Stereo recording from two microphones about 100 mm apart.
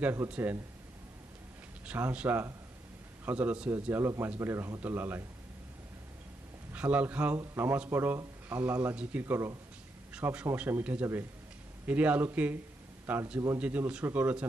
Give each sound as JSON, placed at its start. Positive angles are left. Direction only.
{"t": 0.0, "sound": "a man's voice", "side_deg": -25}
{"t": 1.9, "sound": "a man's voice", "side_deg": -15}
{"t": 6.7, "sound": "a man's voice", "side_deg": -15}